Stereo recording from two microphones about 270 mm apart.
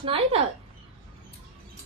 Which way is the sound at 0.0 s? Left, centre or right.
Right.